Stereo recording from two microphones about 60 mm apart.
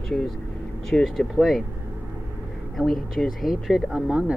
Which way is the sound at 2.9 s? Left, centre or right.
Centre.